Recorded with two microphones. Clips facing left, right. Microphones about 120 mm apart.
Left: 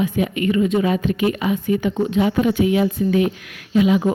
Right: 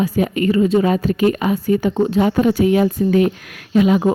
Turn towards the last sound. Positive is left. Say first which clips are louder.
# right 2 dB
turn(degrees=-45)  # may be behind; listen again after turning